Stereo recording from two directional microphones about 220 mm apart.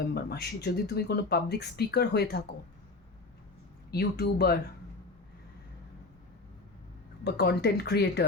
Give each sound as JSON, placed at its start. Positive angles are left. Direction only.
{"t": 0.1, "sound": "speech", "side_deg": 45}
{"t": 3.9, "sound": "speech", "side_deg": 45}
{"t": 7.3, "sound": "speech", "side_deg": 45}